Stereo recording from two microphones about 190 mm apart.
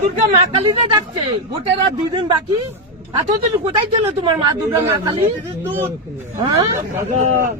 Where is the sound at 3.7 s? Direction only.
25° right (ahead or behind).